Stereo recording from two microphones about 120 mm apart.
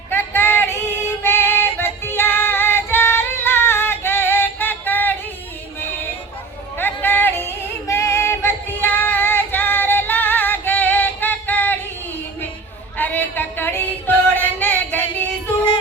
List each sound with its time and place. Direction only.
0.1 s music: 20° left (ahead or behind)
6.7 s music: 15° left (ahead or behind)
13.0 s music: 15° left (ahead or behind)